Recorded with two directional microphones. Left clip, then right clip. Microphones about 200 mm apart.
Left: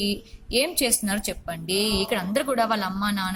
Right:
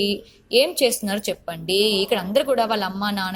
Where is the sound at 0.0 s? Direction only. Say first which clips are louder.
Right 5 dB; 10° right (ahead or behind).